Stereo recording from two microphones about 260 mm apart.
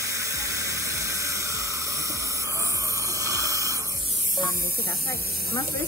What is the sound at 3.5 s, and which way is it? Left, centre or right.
Music, centre.